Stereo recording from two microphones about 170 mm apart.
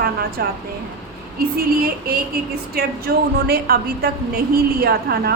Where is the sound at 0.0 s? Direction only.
60° right (ahead or behind).